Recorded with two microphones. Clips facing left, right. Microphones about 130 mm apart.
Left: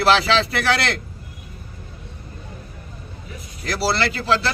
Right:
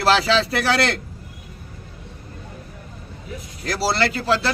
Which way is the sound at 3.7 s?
40° right (ahead or behind).